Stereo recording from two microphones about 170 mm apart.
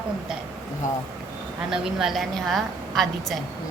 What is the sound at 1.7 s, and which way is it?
A woman's voice, 5° right (ahead or behind).